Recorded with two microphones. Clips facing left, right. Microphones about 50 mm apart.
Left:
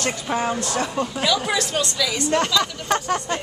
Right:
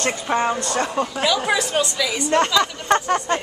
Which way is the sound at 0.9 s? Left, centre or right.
Centre.